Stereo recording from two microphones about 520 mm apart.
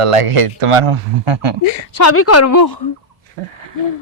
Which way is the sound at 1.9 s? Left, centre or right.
Left.